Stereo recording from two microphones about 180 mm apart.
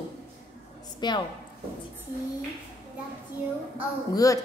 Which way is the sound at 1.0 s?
25° left (ahead or behind).